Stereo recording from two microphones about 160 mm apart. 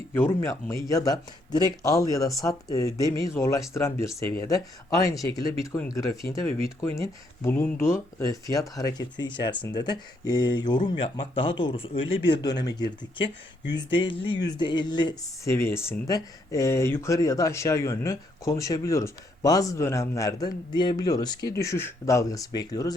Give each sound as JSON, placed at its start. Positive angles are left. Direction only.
{"t": 0.1, "sound": "speech", "side_deg": 15}
{"t": 15.5, "sound": "speech", "side_deg": 15}